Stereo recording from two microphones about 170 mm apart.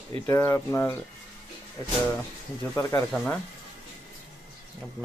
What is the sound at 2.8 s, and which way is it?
Speech, 20° left (ahead or behind).